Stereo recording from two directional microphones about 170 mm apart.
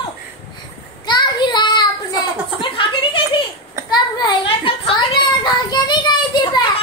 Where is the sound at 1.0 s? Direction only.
25° left (ahead or behind).